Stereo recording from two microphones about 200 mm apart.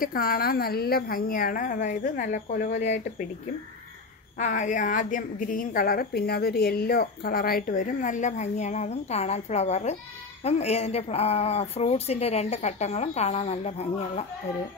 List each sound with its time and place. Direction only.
0.0 s a woman's voice: 45° left (ahead or behind)
2.8 s a woman's voice: 35° left (ahead or behind)
4.4 s a woman's voice: 40° left (ahead or behind)